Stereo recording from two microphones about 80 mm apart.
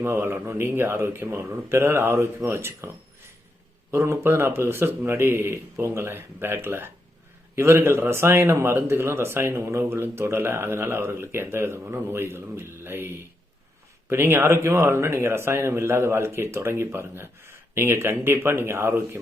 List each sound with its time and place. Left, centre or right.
0.0 s a man's voice: right
3.9 s a man's voice: right